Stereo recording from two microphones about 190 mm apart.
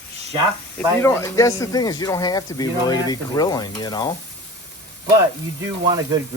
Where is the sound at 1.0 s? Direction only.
15° left (ahead or behind).